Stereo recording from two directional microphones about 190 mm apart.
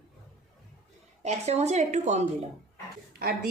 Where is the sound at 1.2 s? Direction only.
35° right (ahead or behind).